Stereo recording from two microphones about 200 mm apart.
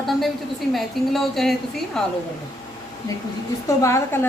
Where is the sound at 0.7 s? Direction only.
Centre (ahead or behind).